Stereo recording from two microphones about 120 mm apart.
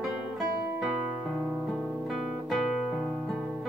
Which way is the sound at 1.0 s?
15° right (ahead or behind).